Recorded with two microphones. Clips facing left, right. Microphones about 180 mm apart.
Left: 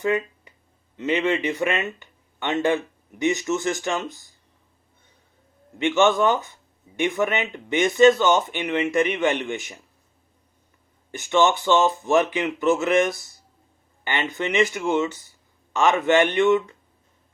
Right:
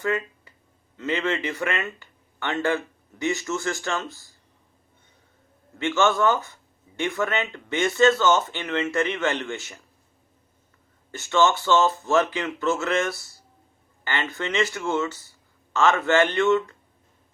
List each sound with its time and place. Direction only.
0.0 s a sound: 20° left (ahead or behind)
0.9 s speech: 20° left (ahead or behind)
5.8 s speech: 15° left (ahead or behind)
11.1 s speech: 15° left (ahead or behind)